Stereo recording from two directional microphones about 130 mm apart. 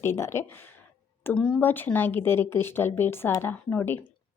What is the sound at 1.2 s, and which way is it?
A woman's voice, 10° left (ahead or behind).